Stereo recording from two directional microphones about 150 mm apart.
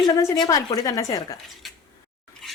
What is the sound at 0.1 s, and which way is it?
Speech, 20° left (ahead or behind).